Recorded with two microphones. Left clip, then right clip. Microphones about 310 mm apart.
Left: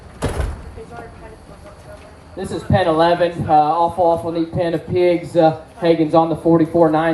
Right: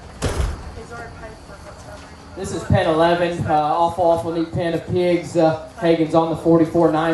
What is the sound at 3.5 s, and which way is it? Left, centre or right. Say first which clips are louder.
Speech: left 4 dB; left.